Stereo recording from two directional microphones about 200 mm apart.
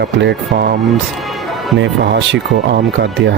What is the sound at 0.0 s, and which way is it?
Speech, 60° right (ahead or behind).